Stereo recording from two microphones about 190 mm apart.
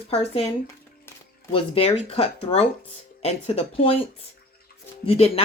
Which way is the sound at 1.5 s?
30° left (ahead or behind).